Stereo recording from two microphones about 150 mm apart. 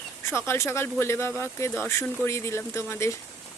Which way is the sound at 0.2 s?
15° left (ahead or behind).